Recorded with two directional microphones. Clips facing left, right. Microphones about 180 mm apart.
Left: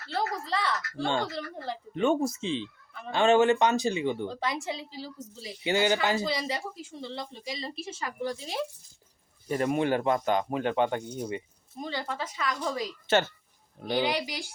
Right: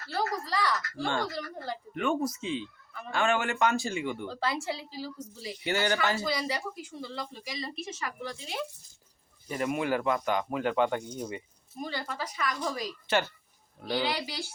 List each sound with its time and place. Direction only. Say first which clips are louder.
0.4 s speech: even; 25° left (ahead or behind)